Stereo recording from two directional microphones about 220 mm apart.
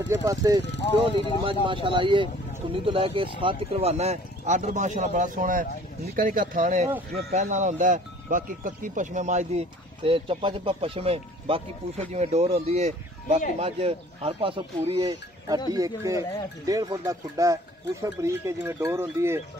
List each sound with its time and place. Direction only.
0.1 s speech: 15° right (ahead or behind)
1.1 s speech: 20° left (ahead or behind)
1.4 s speech: 25° right (ahead or behind)